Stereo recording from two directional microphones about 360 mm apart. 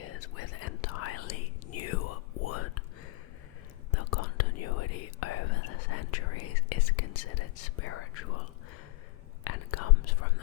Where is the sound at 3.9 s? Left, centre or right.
Left.